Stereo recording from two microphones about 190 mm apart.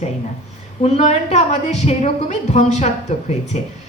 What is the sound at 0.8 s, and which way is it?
A woman's voice, 35° left (ahead or behind).